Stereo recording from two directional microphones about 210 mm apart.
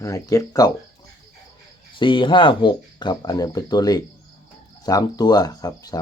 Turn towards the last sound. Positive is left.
turn(degrees=20)  # may be behind; listen again after turning